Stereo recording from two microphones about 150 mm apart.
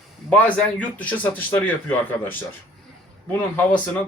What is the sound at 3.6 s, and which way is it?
Speech, 10° left (ahead or behind).